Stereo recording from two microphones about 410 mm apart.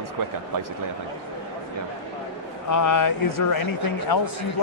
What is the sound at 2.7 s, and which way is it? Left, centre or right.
Speech, left.